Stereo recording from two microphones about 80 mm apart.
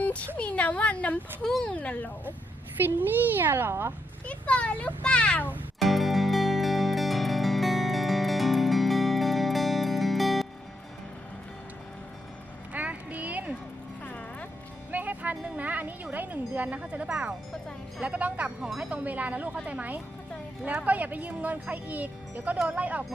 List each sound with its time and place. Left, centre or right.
0.0 s a sound: centre
0.3 s a child's voice: centre
1.5 s a child's voice: centre
1.7 s a child's voice: centre
2.8 s speech: right
4.3 s a child's voice: centre
5.8 s music: centre
12.7 s music: centre
14.0 s music: centre
14.9 s music: right
16.1 s speech: right